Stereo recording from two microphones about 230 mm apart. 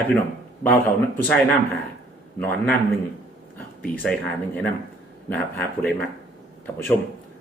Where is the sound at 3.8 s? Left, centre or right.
Centre.